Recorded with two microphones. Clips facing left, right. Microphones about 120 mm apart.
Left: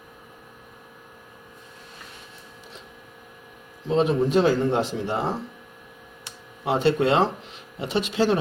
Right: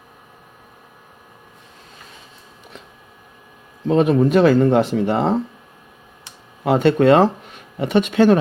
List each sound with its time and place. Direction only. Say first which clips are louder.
3.8 s speech: right 6 dB; 55° right (ahead or behind)
6.7 s speech: right 7 dB; 55° right (ahead or behind)